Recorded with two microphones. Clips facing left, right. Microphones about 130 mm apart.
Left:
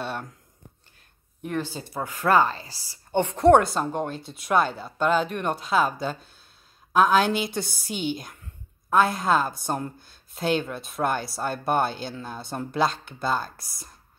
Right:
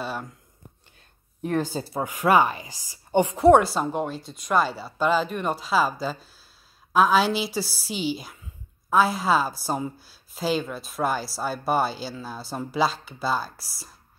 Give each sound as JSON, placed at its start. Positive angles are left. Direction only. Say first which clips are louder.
{"t": 0.0, "sound": "a sound", "louder": "even", "side_deg": 0}
{"t": 1.4, "sound": "speech", "louder": "right 4 dB", "side_deg": -40}
{"t": 2.0, "sound": "a woman's voice", "louder": "right 1 dB", "side_deg": -15}